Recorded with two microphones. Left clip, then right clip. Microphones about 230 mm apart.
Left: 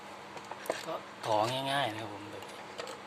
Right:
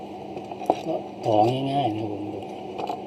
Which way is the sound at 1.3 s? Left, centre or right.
Left.